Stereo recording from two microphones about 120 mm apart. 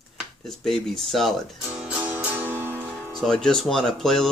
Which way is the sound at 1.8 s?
10° right (ahead or behind).